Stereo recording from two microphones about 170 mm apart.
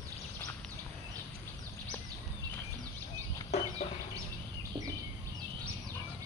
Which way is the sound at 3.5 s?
40° left (ahead or behind).